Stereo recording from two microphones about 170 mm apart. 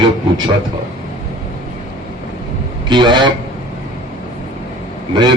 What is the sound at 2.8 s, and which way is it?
Speech, 25° right (ahead or behind).